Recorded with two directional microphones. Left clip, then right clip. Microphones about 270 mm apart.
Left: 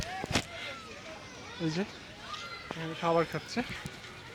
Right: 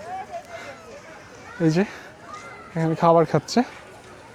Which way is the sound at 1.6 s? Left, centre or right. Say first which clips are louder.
Right 13 dB; right.